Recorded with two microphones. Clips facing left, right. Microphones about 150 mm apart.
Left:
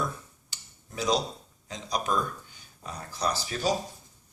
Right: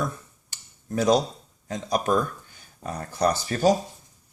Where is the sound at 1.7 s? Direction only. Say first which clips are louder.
Right 6 dB; 50° right (ahead or behind).